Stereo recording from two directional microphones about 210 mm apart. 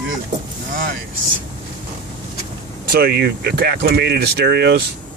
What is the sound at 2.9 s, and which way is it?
Speech, 50° right (ahead or behind).